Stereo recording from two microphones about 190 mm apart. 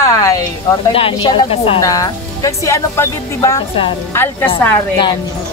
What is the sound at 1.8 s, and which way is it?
Speech, 20° left (ahead or behind).